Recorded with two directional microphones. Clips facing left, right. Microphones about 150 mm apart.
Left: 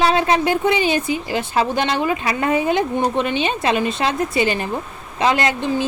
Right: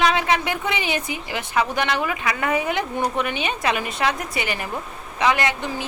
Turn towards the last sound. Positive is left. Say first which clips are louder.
# left 5 dB
turn(degrees=30)  # may be behind; listen again after turning